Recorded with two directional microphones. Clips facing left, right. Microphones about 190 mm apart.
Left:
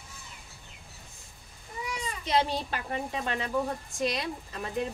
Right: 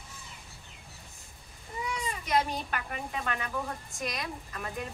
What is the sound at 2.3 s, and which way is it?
A woman's voice, 30° left (ahead or behind).